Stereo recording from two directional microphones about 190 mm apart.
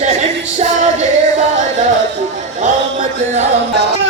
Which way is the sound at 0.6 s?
40° right (ahead or behind).